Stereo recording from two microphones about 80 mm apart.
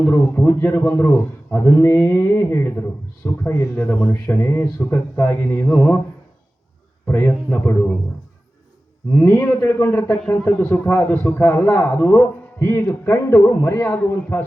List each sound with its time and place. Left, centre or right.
0.0 s a man's voice: left
7.1 s a man's voice: left
9.1 s a man's voice: left
10.2 s a man's voice: centre; by 13.8 s left
13.8 s a man's voice: left